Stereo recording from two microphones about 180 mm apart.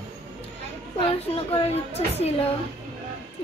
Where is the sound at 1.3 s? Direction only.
35° left (ahead or behind).